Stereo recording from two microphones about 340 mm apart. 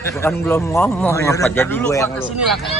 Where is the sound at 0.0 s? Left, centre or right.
Centre.